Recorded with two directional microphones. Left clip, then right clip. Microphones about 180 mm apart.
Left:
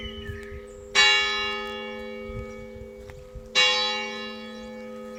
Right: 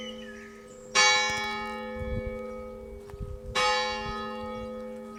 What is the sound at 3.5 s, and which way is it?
Church bell, 45° right (ahead or behind).